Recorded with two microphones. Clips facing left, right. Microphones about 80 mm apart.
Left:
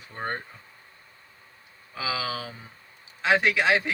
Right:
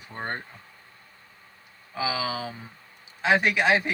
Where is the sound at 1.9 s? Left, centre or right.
Right.